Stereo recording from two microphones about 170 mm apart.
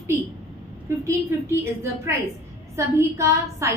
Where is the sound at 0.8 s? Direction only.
15° right (ahead or behind).